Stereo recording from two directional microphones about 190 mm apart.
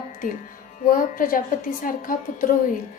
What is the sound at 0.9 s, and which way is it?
A woman's voice, 45° left (ahead or behind).